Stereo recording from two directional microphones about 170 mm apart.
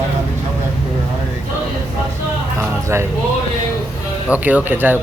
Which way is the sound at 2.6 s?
15° right (ahead or behind).